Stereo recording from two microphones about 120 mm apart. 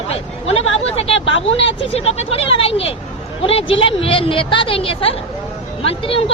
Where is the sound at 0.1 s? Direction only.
55° left (ahead or behind).